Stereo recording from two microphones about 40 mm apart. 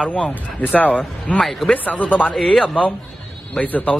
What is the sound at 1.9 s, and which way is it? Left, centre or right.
Speech, left.